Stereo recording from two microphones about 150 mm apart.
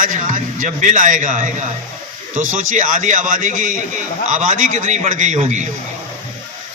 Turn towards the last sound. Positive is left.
turn(degrees=-50)  # may be behind; listen again after turning